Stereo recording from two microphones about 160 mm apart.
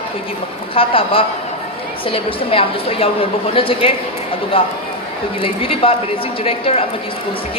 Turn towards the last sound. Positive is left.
turn(degrees=35)  # may be behind; listen again after turning